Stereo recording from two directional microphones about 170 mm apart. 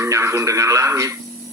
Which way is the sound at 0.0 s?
15° right (ahead or behind).